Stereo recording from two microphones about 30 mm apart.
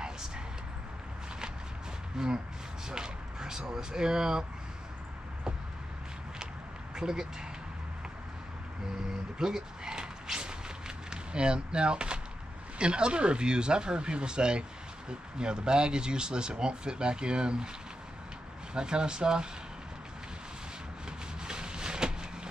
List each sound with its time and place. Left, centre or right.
2.2 s speech: centre
7.0 s speech: centre
9.4 s a sound: right
11.1 s speech: right
18.7 s speech: right
21.4 s a sound: right